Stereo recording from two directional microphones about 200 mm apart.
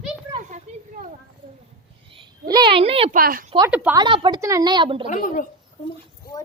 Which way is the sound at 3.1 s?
45° right (ahead or behind).